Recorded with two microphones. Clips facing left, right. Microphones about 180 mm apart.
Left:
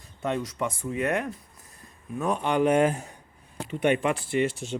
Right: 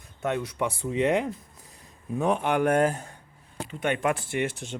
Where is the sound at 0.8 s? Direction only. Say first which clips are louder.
Right 4 dB; 20° right (ahead or behind).